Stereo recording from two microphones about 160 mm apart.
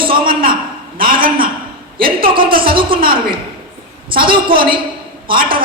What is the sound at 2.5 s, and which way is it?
Speech, 30° right (ahead or behind).